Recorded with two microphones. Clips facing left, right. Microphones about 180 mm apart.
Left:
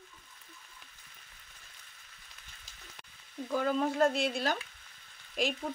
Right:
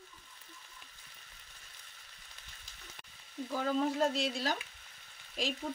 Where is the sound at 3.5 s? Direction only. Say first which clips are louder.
Left 2 dB; 55° left (ahead or behind).